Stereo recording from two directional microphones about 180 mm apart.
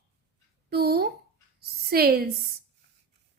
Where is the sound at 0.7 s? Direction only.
60° right (ahead or behind).